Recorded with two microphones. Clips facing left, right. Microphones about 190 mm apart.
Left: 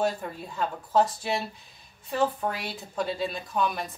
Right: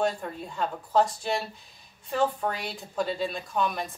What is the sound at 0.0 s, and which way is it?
Speech, centre (ahead or behind).